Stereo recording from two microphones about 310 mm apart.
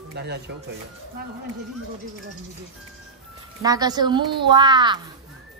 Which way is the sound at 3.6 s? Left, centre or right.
Centre.